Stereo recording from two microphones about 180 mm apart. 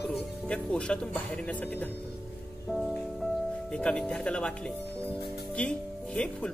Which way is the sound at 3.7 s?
5° left (ahead or behind).